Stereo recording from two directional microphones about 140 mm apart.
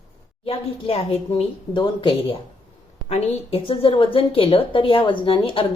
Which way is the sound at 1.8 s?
35° left (ahead or behind).